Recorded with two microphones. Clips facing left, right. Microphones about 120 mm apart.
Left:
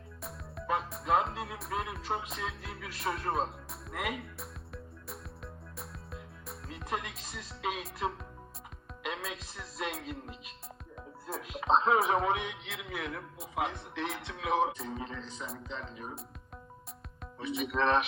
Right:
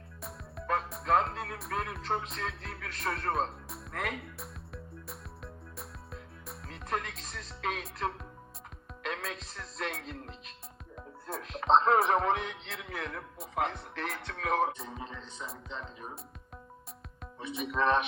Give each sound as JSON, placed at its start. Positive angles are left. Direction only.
{"t": 0.2, "sound": "music", "side_deg": 0}
{"t": 10.9, "sound": "speech", "side_deg": 0}
{"t": 17.5, "sound": "speech", "side_deg": 0}